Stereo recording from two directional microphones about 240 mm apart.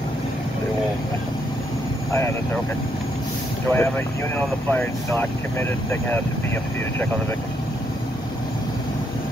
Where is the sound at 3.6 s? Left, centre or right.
Centre.